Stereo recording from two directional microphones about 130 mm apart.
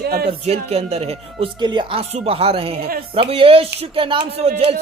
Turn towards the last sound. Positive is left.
turn(degrees=-50)  # may be behind; listen again after turning